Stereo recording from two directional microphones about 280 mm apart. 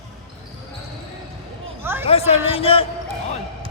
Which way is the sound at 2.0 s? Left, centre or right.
Left.